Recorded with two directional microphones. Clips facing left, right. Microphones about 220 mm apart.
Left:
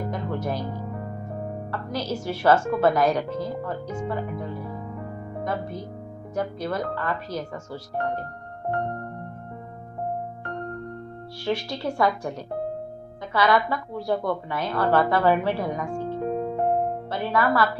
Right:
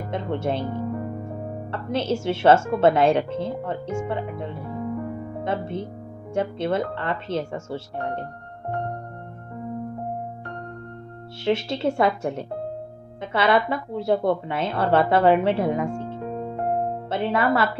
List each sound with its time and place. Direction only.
0.1 s a woman's voice: 25° right (ahead or behind)
11.4 s a woman's voice: 25° right (ahead or behind)
17.1 s a woman's voice: 25° right (ahead or behind)